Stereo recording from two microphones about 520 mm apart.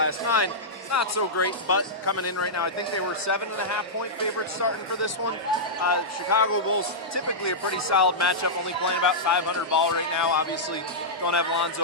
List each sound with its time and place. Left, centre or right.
0.0 s speech: left
5.8 s speech: left